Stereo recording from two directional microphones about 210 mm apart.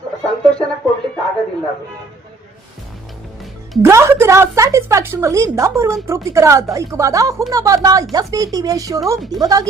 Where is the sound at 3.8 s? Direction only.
15° right (ahead or behind).